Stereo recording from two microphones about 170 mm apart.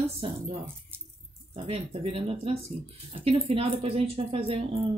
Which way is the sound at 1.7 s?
35° right (ahead or behind).